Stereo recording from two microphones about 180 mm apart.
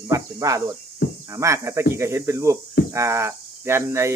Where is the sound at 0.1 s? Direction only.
20° right (ahead or behind).